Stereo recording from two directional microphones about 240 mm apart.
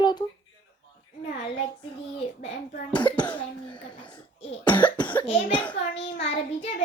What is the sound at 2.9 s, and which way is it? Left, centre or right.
A child's voice, centre.